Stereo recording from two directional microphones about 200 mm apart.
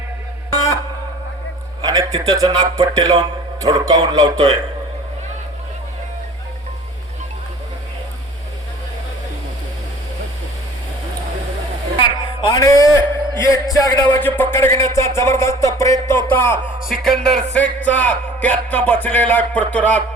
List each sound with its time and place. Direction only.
1.8 s a man's voice: 20° right (ahead or behind)
12.0 s a sound: 25° left (ahead or behind)
13.4 s speech: 15° left (ahead or behind)
16.9 s speech: centre (ahead or behind)
17.9 s music: 10° left (ahead or behind)